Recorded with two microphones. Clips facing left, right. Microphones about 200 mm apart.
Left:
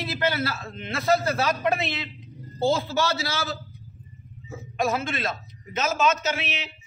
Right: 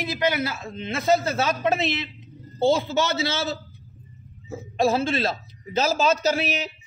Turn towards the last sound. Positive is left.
turn(degrees=-40)  # may be behind; listen again after turning